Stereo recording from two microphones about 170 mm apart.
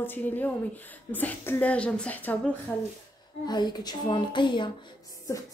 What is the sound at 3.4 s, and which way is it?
Speech, 25° left (ahead or behind).